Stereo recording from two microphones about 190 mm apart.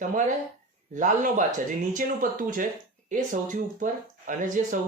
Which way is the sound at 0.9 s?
40° right (ahead or behind).